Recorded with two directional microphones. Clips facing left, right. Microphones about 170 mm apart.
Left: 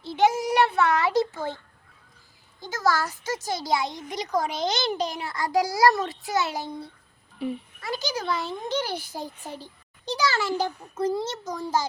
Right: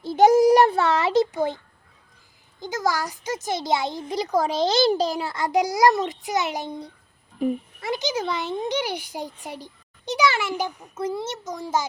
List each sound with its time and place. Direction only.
0.0 s a sound: 40° right (ahead or behind); by 1.5 s 15° right (ahead or behind)
2.6 s a child's voice: 15° right (ahead or behind)
7.3 s a child's voice: 45° right (ahead or behind)
7.8 s a child's voice: 20° right (ahead or behind)